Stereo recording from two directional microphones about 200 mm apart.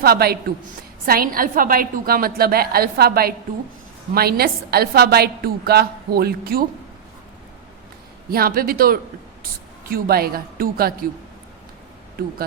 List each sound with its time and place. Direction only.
0.0 s a woman's voice: 50° right (ahead or behind)
8.3 s a woman's voice: 50° right (ahead or behind)